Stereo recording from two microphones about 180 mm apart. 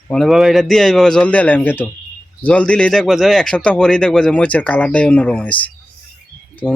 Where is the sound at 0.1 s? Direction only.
Centre (ahead or behind).